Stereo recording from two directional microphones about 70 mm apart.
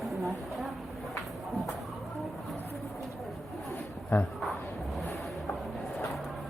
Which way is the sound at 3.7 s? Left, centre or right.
Left.